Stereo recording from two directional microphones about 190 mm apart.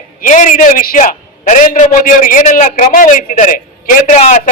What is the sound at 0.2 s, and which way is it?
A man's voice, 40° left (ahead or behind).